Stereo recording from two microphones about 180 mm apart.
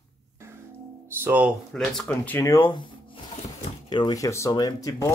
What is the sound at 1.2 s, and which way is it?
Speech, 10° right (ahead or behind).